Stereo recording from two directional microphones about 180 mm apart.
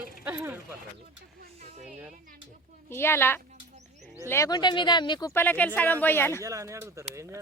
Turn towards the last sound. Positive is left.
turn(degrees=-15)  # may be behind; listen again after turning